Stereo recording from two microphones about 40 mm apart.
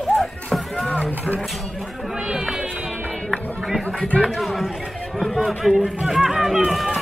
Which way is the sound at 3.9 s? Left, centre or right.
Left.